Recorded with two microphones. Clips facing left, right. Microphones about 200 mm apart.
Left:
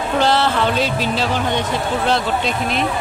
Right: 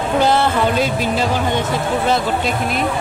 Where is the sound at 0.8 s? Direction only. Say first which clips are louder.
Right 2 dB; 50° right (ahead or behind).